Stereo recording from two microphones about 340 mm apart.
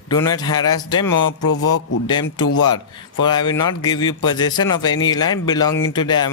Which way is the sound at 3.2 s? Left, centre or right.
Centre.